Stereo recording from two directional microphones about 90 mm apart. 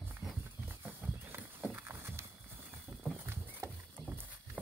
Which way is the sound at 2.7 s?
25° right (ahead or behind).